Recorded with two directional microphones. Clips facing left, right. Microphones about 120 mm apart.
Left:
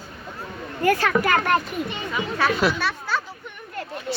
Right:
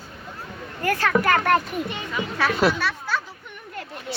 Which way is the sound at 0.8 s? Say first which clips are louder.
Left 1 dB; 15° left (ahead or behind).